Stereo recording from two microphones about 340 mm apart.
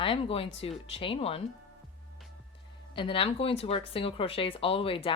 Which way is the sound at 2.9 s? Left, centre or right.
Centre.